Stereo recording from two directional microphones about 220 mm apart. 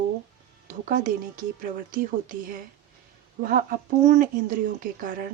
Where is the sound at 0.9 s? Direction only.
40° right (ahead or behind).